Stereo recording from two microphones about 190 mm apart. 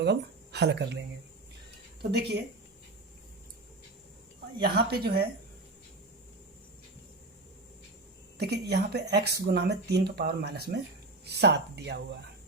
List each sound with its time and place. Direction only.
0.0 s speech: 60° right (ahead or behind)
4.6 s speech: 55° right (ahead or behind)
8.4 s speech: 60° right (ahead or behind)